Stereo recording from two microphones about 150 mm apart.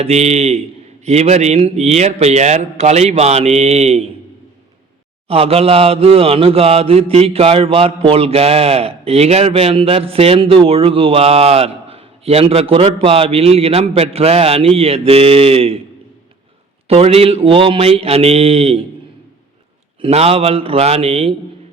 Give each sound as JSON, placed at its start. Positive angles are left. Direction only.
{"t": 0.0, "sound": "speech", "side_deg": -45}
{"t": 5.3, "sound": "mantra", "side_deg": -40}
{"t": 16.9, "sound": "mantra", "side_deg": -40}
{"t": 20.0, "sound": "mantra", "side_deg": -45}